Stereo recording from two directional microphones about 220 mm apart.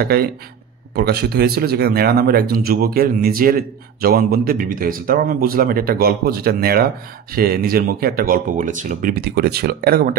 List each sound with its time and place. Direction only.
0.0 s speech: 45° right (ahead or behind)